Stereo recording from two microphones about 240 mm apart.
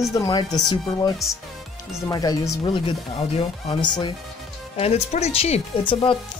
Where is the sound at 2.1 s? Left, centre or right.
Centre.